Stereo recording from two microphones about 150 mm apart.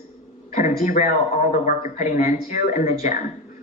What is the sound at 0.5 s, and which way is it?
Speech, 50° left (ahead or behind).